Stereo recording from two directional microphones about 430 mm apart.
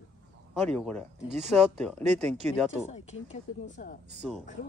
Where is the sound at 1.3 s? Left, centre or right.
Centre.